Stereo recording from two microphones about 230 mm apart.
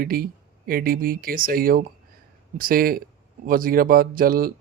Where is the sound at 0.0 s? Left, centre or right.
Right.